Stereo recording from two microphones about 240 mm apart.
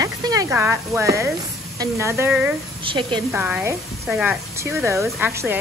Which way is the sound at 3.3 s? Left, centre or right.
Centre.